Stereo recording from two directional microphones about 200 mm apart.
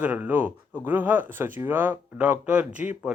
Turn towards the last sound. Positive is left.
turn(degrees=-5)  # may be behind; listen again after turning